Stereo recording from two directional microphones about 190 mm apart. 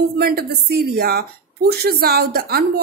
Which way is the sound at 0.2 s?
55° right (ahead or behind).